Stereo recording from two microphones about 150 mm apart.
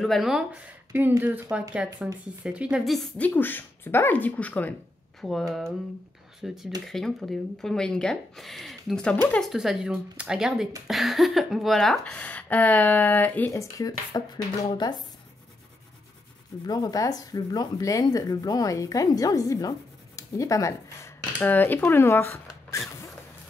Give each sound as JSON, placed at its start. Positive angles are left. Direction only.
{"t": 0.0, "sound": "speech", "side_deg": 0}
{"t": 0.9, "sound": "speech", "side_deg": -15}
{"t": 9.5, "sound": "speech", "side_deg": -5}
{"t": 16.6, "sound": "speech", "side_deg": 25}